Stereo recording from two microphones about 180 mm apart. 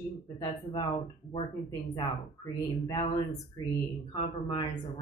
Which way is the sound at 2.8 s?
20° left (ahead or behind).